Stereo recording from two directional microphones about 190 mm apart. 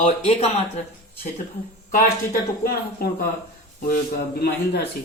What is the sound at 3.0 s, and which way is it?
Speech, 55° left (ahead or behind).